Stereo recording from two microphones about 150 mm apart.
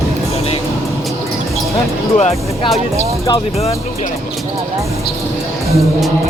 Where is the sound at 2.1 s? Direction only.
45° left (ahead or behind).